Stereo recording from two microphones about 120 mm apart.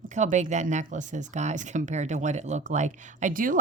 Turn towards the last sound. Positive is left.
turn(degrees=-90)